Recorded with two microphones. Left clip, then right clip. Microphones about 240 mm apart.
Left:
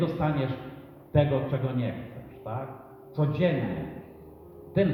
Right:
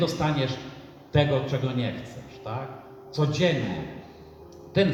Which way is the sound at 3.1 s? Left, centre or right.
Right.